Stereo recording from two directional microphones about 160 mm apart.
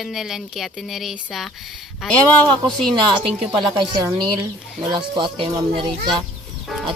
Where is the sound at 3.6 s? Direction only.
30° right (ahead or behind).